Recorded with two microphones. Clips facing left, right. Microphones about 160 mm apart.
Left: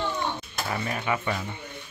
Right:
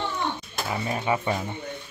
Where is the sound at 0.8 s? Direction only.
25° right (ahead or behind).